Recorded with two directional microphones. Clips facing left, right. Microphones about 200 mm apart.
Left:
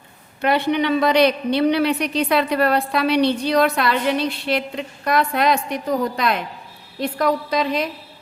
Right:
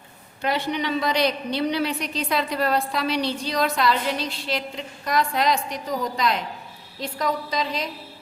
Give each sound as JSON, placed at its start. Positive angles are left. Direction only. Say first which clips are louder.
{"t": 0.4, "sound": "a woman's voice", "louder": "left 6 dB", "side_deg": 60}